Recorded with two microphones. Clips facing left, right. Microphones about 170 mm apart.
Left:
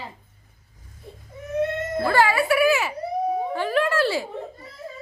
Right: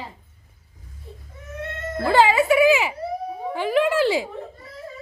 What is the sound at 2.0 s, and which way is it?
A woman's voice, 20° right (ahead or behind).